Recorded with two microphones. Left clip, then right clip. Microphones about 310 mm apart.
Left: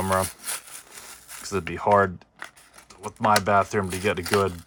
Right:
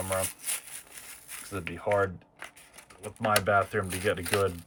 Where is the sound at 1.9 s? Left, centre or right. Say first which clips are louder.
Left 8 dB; left.